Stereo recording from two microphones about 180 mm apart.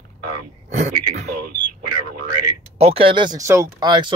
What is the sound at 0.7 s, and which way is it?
Speech, 40° right (ahead or behind).